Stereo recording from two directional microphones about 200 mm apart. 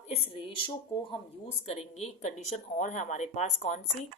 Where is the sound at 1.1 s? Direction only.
30° left (ahead or behind).